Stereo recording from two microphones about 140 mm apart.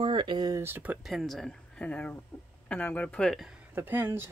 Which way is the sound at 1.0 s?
Centre (ahead or behind).